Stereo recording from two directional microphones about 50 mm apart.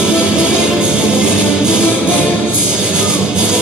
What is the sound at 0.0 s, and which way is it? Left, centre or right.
Music, centre.